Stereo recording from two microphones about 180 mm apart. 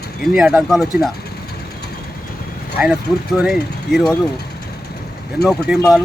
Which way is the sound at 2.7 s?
10° right (ahead or behind).